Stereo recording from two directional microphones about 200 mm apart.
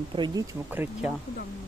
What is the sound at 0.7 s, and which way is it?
Speech, 10° right (ahead or behind).